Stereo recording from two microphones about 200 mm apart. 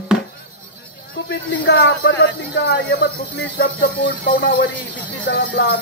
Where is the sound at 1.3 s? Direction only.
60° left (ahead or behind).